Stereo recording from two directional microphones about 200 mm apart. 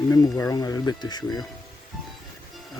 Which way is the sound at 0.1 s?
15° left (ahead or behind).